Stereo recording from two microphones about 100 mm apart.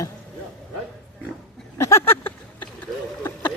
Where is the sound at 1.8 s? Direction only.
30° left (ahead or behind).